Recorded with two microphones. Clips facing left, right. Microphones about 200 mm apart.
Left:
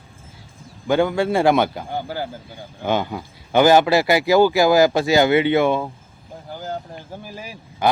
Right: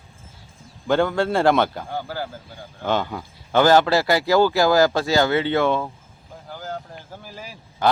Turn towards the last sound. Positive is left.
turn(degrees=15)  # may be behind; listen again after turning